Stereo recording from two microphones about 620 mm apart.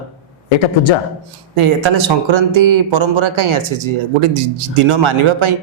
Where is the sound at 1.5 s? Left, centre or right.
Right.